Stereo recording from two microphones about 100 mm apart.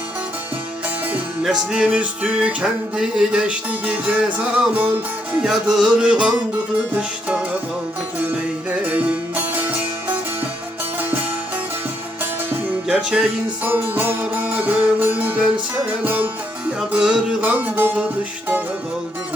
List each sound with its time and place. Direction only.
1.5 s music: 5° right (ahead or behind)
8.8 s music: 15° right (ahead or behind)
12.9 s music: 10° right (ahead or behind)